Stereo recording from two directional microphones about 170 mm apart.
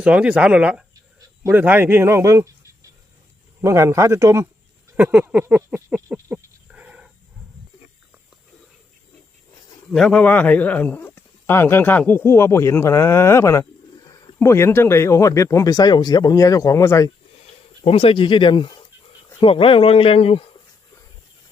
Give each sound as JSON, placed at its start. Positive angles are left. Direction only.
{"t": 0.0, "sound": "a man's voice", "side_deg": -5}
{"t": 3.6, "sound": "a man's voice", "side_deg": -15}
{"t": 4.9, "sound": "livestock", "side_deg": -10}
{"t": 9.9, "sound": "speech", "side_deg": 5}
{"t": 17.3, "sound": "a sound", "side_deg": 35}
{"t": 19.3, "sound": "speech", "side_deg": 30}